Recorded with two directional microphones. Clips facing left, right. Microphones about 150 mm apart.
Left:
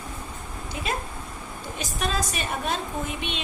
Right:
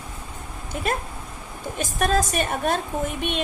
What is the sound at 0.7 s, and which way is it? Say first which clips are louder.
Speech: right 4 dB; 50° right (ahead or behind).